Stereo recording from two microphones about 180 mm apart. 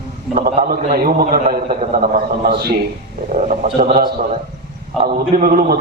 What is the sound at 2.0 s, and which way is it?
Speech, 55° right (ahead or behind).